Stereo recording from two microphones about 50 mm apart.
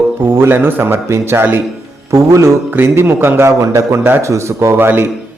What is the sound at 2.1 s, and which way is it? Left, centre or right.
Speech, right.